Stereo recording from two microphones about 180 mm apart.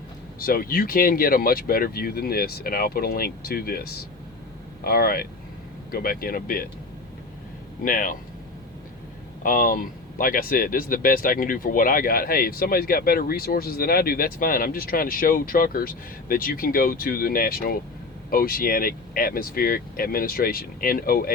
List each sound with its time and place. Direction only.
0.3 s speech: 55° left (ahead or behind)
7.9 s speech: 50° left (ahead or behind)
9.4 s speech: 50° left (ahead or behind)